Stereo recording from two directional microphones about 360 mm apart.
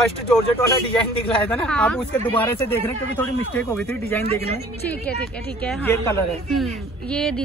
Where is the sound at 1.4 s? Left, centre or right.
Centre.